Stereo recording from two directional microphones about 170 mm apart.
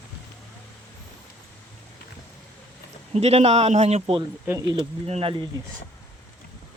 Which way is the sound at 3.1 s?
40° right (ahead or behind).